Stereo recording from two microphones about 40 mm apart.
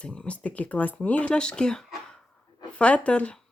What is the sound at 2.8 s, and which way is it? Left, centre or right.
Speech, left.